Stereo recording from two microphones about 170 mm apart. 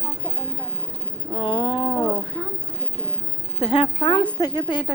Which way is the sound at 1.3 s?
30° left (ahead or behind).